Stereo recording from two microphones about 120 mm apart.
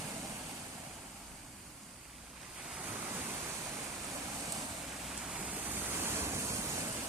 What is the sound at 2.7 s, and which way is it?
Waves, 10° right (ahead or behind).